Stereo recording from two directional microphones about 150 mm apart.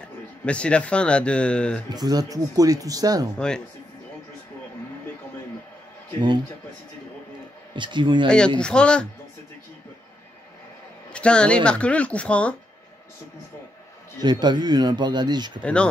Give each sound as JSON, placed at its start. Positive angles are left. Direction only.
{"t": 0.0, "sound": "speech", "side_deg": 5}
{"t": 2.0, "sound": "speech", "side_deg": -25}
{"t": 3.3, "sound": "speech", "side_deg": 5}
{"t": 7.7, "sound": "speech", "side_deg": -30}
{"t": 8.5, "sound": "speech", "side_deg": 5}
{"t": 11.1, "sound": "speech", "side_deg": 5}
{"t": 14.2, "sound": "speech", "side_deg": -30}
{"t": 15.6, "sound": "speech", "side_deg": 5}